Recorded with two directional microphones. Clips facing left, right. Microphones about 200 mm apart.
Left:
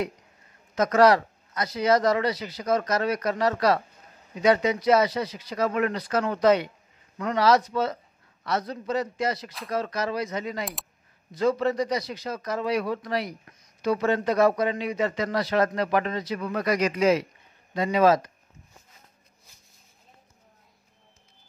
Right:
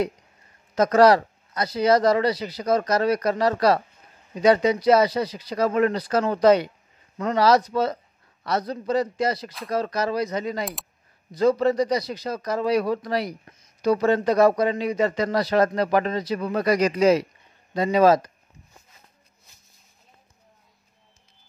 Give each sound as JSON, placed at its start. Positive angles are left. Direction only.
{"t": 0.7, "sound": "speech", "side_deg": -35}
{"t": 10.6, "sound": "speech", "side_deg": 0}
{"t": 11.3, "sound": "speech", "side_deg": -35}